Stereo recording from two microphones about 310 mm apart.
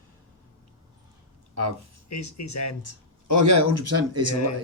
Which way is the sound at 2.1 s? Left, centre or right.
Left.